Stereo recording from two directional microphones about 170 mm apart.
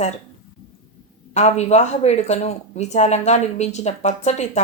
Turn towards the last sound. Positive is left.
turn(degrees=45)  # may be behind; listen again after turning